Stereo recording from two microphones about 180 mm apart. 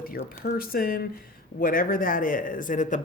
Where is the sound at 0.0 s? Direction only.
55° left (ahead or behind).